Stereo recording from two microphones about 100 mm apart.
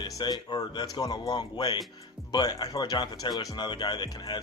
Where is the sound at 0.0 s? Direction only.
45° left (ahead or behind).